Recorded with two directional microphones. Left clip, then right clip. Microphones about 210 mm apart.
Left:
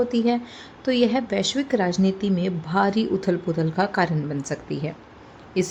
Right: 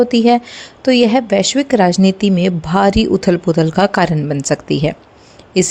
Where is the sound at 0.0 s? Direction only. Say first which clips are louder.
Right 11 dB; 35° right (ahead or behind).